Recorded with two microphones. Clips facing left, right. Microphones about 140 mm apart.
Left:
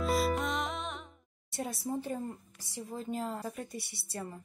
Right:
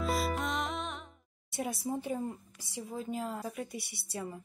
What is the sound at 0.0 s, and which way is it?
Music, centre (ahead or behind).